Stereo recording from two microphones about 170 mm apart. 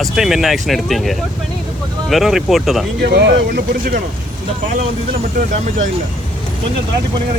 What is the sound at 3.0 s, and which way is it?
Speech, 85° right.